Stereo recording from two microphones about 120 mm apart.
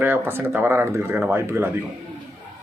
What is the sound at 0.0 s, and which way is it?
Speech, 15° right (ahead or behind).